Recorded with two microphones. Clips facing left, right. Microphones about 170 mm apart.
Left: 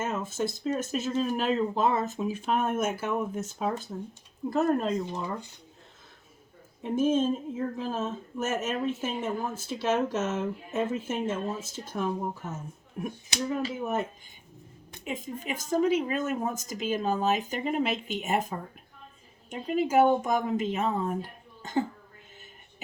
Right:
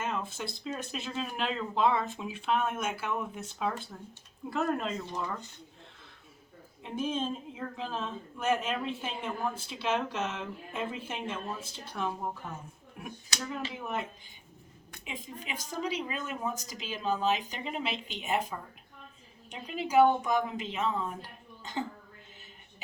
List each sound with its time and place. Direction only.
0.0 s speech: 45° left (ahead or behind)
5.0 s speech: 15° left (ahead or behind)
6.8 s speech: 45° left (ahead or behind)
13.7 s speech: 45° left (ahead or behind)